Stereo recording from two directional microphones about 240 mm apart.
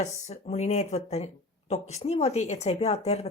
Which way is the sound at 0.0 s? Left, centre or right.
Left.